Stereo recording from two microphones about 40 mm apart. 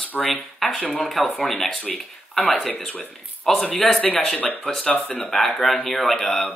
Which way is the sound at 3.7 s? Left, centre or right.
Centre.